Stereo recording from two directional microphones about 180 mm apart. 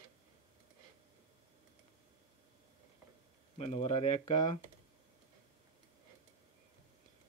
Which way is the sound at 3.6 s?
35° left (ahead or behind).